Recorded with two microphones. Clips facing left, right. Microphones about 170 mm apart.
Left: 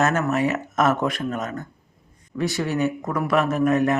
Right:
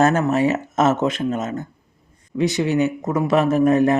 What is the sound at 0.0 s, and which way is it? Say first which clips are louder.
Speech: right 4 dB; 30° right (ahead or behind).